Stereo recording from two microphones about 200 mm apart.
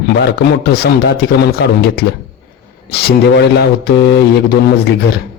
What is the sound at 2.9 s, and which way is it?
Speech, 50° left (ahead or behind).